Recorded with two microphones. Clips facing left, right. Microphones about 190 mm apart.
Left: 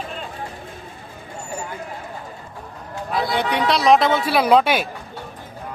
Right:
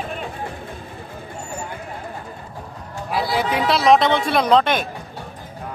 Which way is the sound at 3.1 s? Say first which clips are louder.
Even; 5° right (ahead or behind).